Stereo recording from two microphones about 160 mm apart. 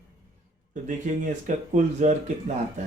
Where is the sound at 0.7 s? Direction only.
50° right (ahead or behind).